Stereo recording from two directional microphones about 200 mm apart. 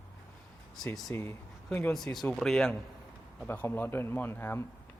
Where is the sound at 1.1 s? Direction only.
10° left (ahead or behind).